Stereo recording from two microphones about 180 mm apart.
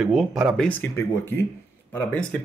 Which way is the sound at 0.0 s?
5° right (ahead or behind).